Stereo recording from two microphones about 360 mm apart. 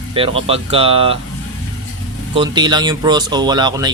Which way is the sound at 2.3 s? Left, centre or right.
Centre.